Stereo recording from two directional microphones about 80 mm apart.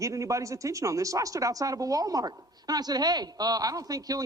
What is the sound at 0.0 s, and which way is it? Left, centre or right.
Speech, right.